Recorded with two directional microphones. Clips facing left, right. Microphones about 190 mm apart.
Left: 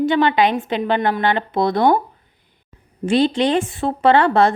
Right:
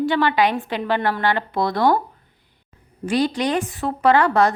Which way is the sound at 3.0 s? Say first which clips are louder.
Left 4 dB; 25° left (ahead or behind).